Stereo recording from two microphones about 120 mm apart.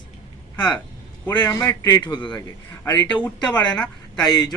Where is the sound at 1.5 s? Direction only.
25° left (ahead or behind).